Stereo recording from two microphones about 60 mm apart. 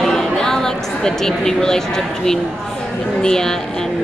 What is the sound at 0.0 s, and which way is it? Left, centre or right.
A woman's voice, centre.